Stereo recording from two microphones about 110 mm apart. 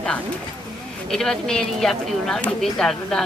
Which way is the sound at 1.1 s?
5° left (ahead or behind).